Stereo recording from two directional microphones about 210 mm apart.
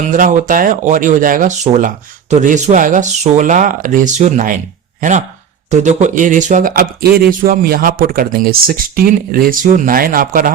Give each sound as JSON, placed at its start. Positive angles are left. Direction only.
{"t": 0.0, "sound": "speech", "side_deg": -40}